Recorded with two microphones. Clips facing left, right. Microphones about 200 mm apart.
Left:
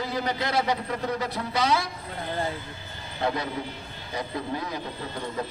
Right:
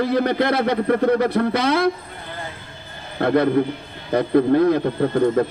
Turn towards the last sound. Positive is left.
turn(degrees=-55)  # may be behind; listen again after turning